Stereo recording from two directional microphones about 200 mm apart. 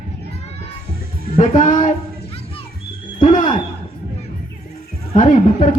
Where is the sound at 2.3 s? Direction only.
30° left (ahead or behind).